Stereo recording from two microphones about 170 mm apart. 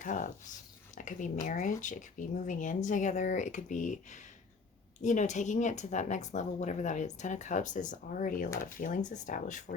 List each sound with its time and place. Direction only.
0.0 s a woman's voice: 50° left (ahead or behind)